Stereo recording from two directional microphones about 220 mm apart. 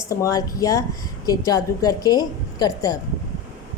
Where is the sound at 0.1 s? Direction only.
15° left (ahead or behind).